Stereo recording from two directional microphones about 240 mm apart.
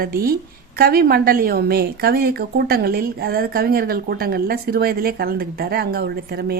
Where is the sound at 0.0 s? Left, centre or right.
Right.